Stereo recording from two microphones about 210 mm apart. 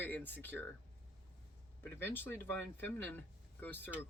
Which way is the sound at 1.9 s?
10° left (ahead or behind).